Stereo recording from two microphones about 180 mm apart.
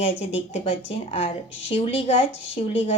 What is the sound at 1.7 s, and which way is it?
Speech, 30° left (ahead or behind).